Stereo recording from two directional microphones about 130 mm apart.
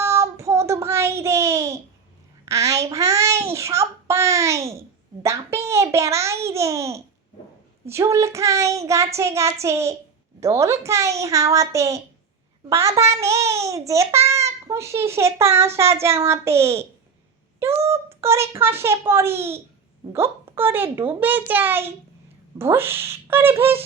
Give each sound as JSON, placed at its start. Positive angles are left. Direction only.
{"t": 0.0, "sound": "child singing", "side_deg": -20}
{"t": 5.2, "sound": "babbling", "side_deg": -20}
{"t": 7.9, "sound": "a child's voice", "side_deg": -20}